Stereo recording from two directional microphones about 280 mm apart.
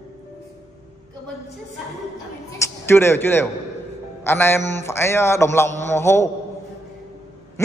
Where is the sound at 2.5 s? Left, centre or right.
Centre.